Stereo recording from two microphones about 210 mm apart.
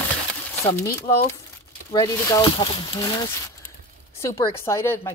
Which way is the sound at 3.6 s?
10° left (ahead or behind).